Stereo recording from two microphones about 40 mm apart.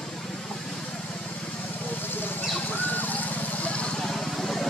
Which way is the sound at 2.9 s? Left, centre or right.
Left.